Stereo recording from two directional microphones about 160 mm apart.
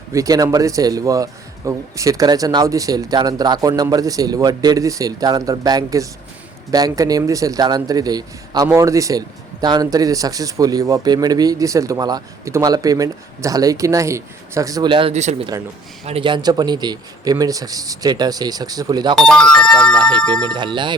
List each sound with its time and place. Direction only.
0.1 s a man's voice: 20° right (ahead or behind); by 15.4 s 45° right (ahead or behind)
16.0 s a man's voice: 35° right (ahead or behind)
19.1 s speech: 5° left (ahead or behind)